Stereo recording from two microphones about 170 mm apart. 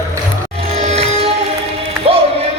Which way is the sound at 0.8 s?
35° right (ahead or behind).